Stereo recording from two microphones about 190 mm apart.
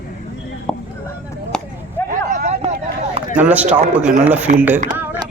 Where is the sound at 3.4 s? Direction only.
10° right (ahead or behind).